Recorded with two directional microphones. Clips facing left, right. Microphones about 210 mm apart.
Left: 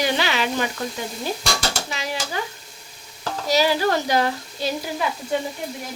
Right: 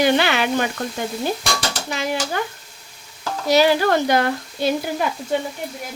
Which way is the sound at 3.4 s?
60° right (ahead or behind).